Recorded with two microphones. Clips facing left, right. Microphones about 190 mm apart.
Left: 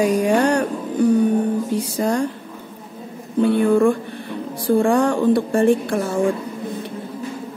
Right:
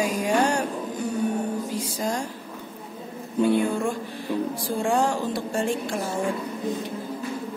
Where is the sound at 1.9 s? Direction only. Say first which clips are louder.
Left 9 dB; 60° left (ahead or behind).